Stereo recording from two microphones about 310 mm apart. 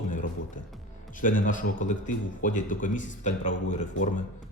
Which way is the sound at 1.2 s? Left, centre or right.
Left.